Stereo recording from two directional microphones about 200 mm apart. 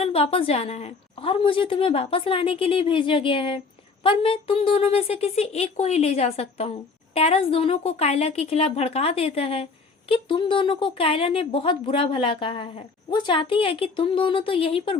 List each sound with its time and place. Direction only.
0.0 s a woman's voice: 30° left (ahead or behind)